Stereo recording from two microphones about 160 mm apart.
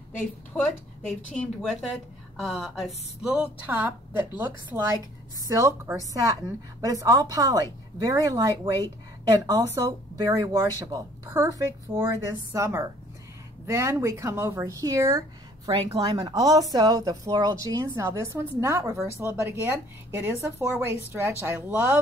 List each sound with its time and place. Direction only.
0.5 s a woman's voice: 5° left (ahead or behind); by 22.0 s 10° right (ahead or behind)